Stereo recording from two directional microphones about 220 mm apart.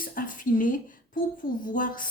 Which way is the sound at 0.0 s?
40° left (ahead or behind).